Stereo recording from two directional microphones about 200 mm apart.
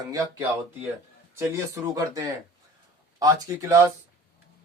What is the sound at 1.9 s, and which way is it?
Speech, 15° right (ahead or behind).